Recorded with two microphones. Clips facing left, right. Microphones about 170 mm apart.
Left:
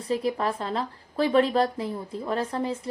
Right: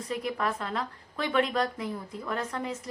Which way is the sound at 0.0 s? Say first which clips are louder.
Left 5 dB; 30° left (ahead or behind).